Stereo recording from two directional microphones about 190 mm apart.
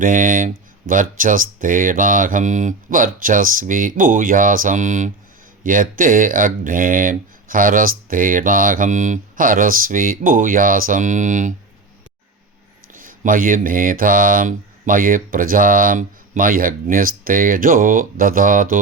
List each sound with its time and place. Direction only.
0.0 s speech: 45° right (ahead or behind)
12.9 s speech: 45° right (ahead or behind)